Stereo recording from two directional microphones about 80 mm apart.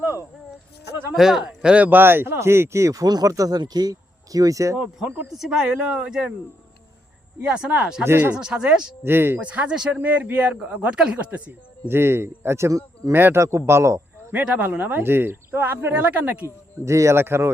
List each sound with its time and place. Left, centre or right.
1.1 s speech: centre; by 3.6 s right
3.6 s speech: right
5.4 s a man's voice: centre
7.4 s a man's voice: centre
8.0 s speech: right
8.4 s a man's voice: centre
9.0 s speech: right
9.4 s a man's voice: centre
11.9 s speech: right
13.1 s a man's voice: right
14.3 s speech: centre
16.7 s speech: right